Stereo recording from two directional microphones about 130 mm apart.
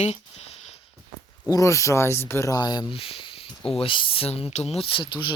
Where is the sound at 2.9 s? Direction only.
45° left (ahead or behind).